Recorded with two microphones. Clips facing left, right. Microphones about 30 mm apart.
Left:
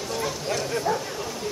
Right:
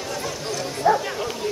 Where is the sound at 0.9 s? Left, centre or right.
Right.